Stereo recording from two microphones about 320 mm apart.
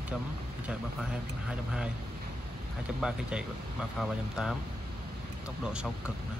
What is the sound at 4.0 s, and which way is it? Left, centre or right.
Speech, centre.